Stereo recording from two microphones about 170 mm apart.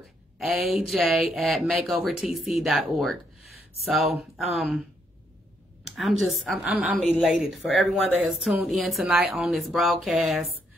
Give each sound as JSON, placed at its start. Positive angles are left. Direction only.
{"t": 0.4, "sound": "speech", "side_deg": 0}
{"t": 5.9, "sound": "speech", "side_deg": 0}